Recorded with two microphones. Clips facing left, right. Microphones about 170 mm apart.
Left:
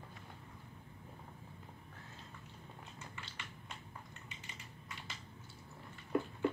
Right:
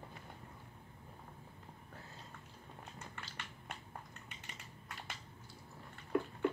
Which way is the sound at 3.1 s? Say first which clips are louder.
Right 1 dB; 55° right (ahead or behind).